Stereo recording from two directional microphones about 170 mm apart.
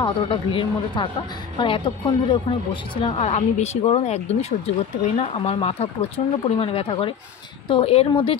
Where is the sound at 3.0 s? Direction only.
35° left (ahead or behind).